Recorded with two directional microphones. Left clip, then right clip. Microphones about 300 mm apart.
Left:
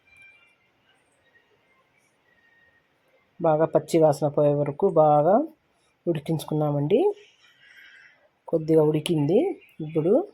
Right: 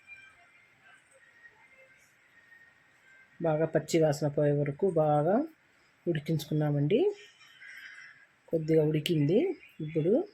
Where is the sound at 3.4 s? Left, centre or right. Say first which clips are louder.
Left 8 dB; centre.